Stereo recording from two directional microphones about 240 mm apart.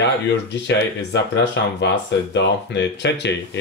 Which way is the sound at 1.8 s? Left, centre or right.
Left.